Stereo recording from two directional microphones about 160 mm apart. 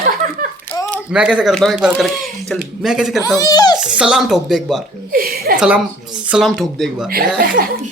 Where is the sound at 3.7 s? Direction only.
5° right (ahead or behind).